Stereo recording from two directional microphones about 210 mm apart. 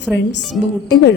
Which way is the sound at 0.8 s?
55° left (ahead or behind).